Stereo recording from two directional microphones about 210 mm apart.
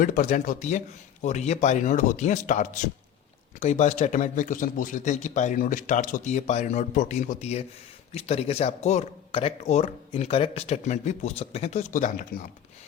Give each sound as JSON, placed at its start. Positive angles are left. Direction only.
{"t": 0.0, "sound": "speech", "side_deg": 40}